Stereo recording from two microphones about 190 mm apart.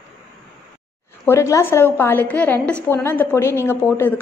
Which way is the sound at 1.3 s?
15° left (ahead or behind).